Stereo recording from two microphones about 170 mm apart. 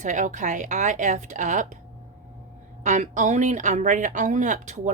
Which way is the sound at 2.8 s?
45° right (ahead or behind).